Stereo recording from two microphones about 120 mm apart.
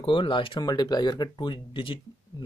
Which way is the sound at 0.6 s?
35° left (ahead or behind).